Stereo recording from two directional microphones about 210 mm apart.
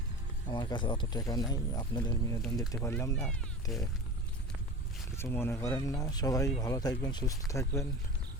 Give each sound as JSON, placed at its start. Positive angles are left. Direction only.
{"t": 0.4, "sound": "speech", "side_deg": 20}
{"t": 3.2, "sound": "speech", "side_deg": 0}
{"t": 5.1, "sound": "speech", "side_deg": 10}